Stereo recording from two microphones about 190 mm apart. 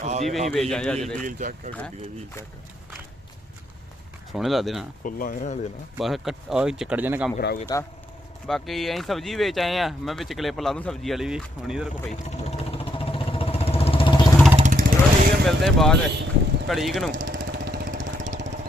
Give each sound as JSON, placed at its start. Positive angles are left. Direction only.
{"t": 0.0, "sound": "speech", "side_deg": -35}
{"t": 0.3, "sound": "speech", "side_deg": 0}
{"t": 1.2, "sound": "speech", "side_deg": -40}
{"t": 4.3, "sound": "speech", "side_deg": 0}
{"t": 5.0, "sound": "speech", "side_deg": 45}
{"t": 6.0, "sound": "speech", "side_deg": 0}
{"t": 7.3, "sound": "speech", "side_deg": 50}
{"t": 8.4, "sound": "speech", "side_deg": 0}
{"t": 12.2, "sound": "vehicle", "side_deg": 30}
{"t": 14.5, "sound": "vehicle", "side_deg": -45}
{"t": 15.4, "sound": "speech", "side_deg": 0}
{"t": 16.1, "sound": "boat", "side_deg": -60}
{"t": 16.6, "sound": "speech", "side_deg": 0}
{"t": 17.2, "sound": "lawn mower", "side_deg": -70}